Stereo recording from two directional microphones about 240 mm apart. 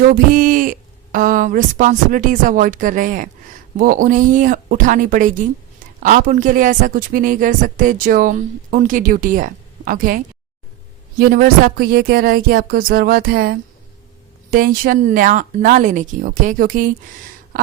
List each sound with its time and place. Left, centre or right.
0.0 s a woman's voice: right
11.2 s a woman's voice: right
17.5 s a sound: right